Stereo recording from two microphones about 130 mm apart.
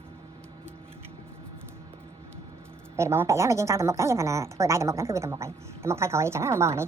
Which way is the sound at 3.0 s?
20° right (ahead or behind).